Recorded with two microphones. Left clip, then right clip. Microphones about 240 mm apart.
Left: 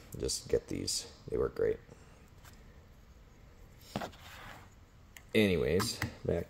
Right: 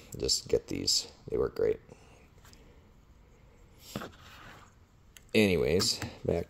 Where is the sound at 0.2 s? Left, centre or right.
Right.